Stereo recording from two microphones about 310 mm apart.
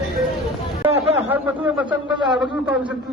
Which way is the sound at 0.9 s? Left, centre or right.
Centre.